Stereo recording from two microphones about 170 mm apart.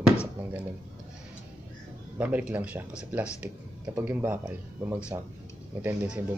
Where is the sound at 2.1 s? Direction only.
10° right (ahead or behind).